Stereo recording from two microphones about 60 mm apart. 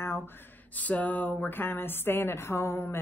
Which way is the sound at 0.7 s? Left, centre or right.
Left.